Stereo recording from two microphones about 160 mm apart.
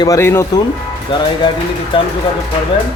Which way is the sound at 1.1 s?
30° left (ahead or behind).